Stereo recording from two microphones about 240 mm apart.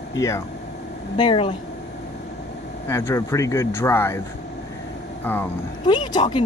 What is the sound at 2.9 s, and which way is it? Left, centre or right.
Speech, centre.